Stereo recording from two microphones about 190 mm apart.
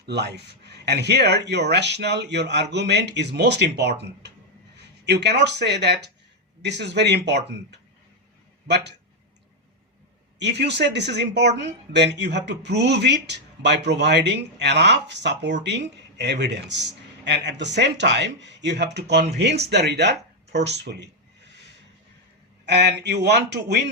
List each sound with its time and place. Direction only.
0.0 s a man's voice: 60° right (ahead or behind)
10.3 s a man's voice: 65° right (ahead or behind)
22.6 s a man's voice: 65° right (ahead or behind)